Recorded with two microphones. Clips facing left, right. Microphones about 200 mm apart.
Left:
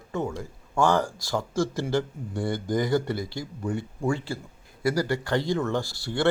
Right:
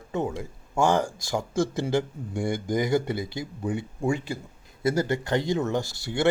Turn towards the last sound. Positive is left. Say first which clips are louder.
# even
turn(degrees=-20)  # may be behind; listen again after turning